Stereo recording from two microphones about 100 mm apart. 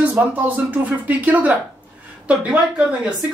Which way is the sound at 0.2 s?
20° right (ahead or behind).